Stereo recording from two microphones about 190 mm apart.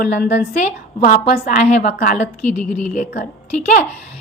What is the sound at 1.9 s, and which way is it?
Speech, 55° left (ahead or behind).